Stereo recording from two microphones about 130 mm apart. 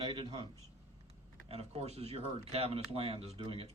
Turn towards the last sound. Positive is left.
turn(degrees=-45)  # may be behind; listen again after turning